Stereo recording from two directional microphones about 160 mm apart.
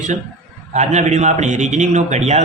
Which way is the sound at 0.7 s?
45° right (ahead or behind).